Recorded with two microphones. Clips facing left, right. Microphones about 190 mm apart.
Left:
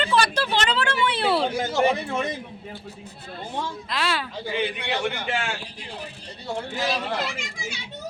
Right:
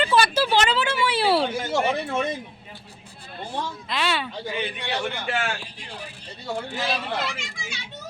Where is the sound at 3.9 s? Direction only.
Centre (ahead or behind).